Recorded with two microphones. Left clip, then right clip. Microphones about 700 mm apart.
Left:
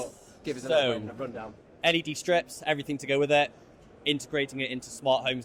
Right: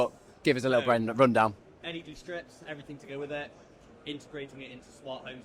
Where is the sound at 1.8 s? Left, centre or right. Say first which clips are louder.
Left 15 dB; left.